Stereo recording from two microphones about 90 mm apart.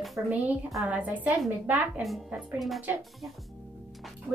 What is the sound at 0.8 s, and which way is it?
Speech, 15° right (ahead or behind).